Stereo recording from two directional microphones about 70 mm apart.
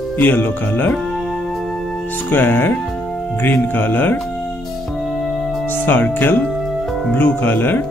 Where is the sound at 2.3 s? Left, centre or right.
Left.